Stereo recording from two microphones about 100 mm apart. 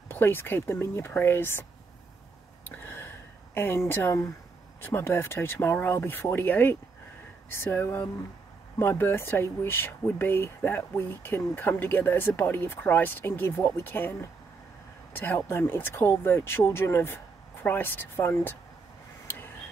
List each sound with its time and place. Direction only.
0.1 s speech: 20° left (ahead or behind)
2.7 s gasp: 20° left (ahead or behind)
3.5 s speech: 25° left (ahead or behind)
15.1 s speech: 20° left (ahead or behind)